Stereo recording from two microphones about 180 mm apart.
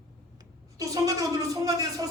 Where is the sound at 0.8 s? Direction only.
20° right (ahead or behind).